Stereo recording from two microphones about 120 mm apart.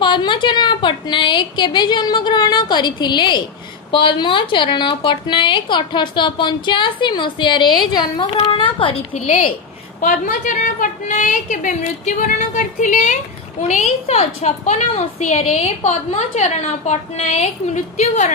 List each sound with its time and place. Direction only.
0.0 s a woman's voice: 40° left (ahead or behind)
9.1 s a woman's voice: 70° left (ahead or behind)
10.0 s a woman's voice: 90° left; by 18.3 s 70° left (ahead or behind)